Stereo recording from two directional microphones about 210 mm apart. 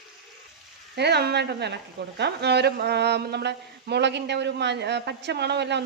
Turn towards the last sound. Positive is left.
turn(degrees=-55)  # may be behind; listen again after turning